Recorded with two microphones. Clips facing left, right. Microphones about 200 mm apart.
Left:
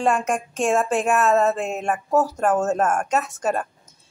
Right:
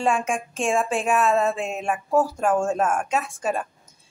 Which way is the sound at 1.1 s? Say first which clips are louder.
Left 1 dB; 5° left (ahead or behind).